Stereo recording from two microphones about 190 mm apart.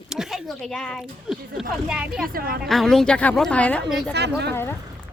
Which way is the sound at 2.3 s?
50° right (ahead or behind).